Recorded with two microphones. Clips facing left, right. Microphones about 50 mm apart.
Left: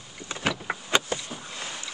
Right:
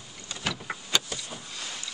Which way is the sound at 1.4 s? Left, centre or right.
Left.